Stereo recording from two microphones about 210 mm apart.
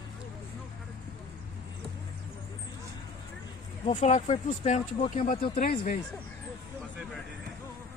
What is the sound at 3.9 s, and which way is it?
Speech, 35° left (ahead or behind).